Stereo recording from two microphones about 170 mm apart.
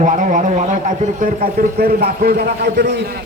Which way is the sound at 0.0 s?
50° right (ahead or behind).